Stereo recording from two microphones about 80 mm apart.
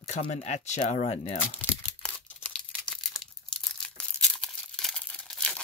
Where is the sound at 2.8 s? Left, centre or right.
Centre.